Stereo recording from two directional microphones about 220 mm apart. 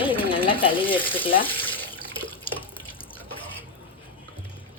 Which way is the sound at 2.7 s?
25° left (ahead or behind).